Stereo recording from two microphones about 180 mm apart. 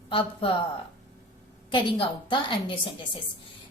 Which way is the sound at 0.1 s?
30° left (ahead or behind).